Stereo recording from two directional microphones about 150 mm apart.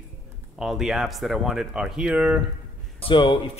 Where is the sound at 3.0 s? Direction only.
35° left (ahead or behind).